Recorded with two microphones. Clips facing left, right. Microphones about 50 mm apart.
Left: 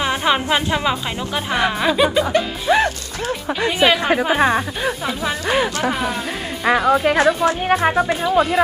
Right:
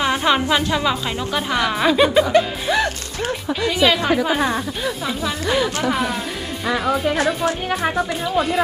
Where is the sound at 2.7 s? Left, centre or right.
Left.